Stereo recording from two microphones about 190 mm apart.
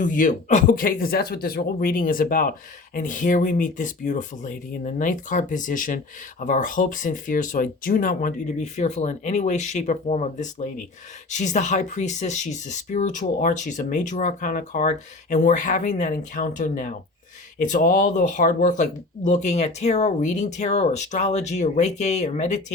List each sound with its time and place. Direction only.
0.0 s speech: 45° left (ahead or behind)